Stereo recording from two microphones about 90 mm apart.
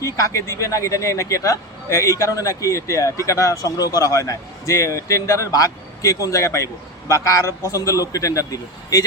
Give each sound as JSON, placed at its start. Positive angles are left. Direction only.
{"t": 0.0, "sound": "speech", "side_deg": 35}